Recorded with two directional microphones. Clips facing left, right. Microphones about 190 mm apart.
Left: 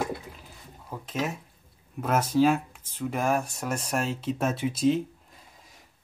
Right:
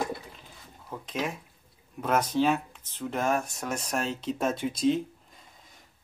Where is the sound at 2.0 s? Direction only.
5° left (ahead or behind).